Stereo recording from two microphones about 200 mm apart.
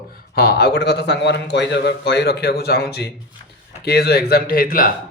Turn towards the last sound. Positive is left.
turn(degrees=45)  # may be behind; listen again after turning